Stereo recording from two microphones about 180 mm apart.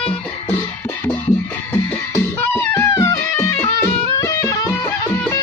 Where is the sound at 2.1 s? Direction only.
15° left (ahead or behind).